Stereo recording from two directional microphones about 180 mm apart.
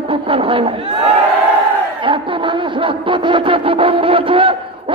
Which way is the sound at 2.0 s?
30° right (ahead or behind).